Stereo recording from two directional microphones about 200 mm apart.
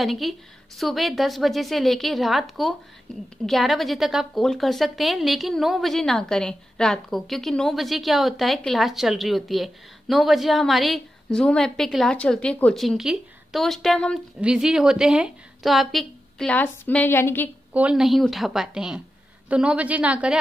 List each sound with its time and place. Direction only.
0.0 s a woman's voice: centre (ahead or behind)
17.7 s a woman's voice: 5° right (ahead or behind)